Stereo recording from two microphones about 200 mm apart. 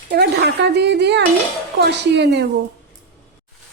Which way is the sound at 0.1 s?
55° right (ahead or behind).